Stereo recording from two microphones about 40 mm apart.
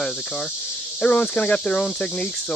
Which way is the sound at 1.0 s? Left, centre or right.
Left.